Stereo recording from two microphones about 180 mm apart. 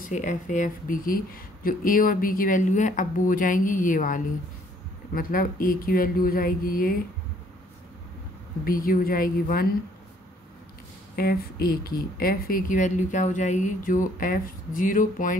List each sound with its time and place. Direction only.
0.0 s speech: 45° left (ahead or behind)
8.6 s speech: 55° left (ahead or behind)
11.1 s speech: 55° left (ahead or behind)